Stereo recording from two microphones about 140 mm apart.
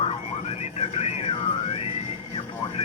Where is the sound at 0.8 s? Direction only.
50° left (ahead or behind).